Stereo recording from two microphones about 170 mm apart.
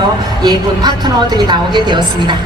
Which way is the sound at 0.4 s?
25° right (ahead or behind).